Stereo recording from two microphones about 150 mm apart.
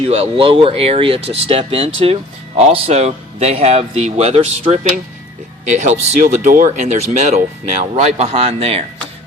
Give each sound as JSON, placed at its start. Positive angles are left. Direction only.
{"t": 0.0, "sound": "speech", "side_deg": -40}
{"t": 6.2, "sound": "speech", "side_deg": -65}